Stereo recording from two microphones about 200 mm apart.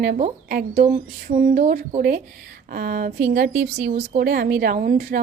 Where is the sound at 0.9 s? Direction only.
35° right (ahead or behind).